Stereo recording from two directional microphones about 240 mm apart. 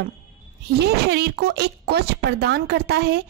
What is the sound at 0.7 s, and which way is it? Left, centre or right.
A woman's voice, right.